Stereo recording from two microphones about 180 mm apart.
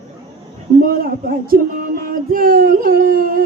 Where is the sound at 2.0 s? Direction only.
55° right (ahead or behind).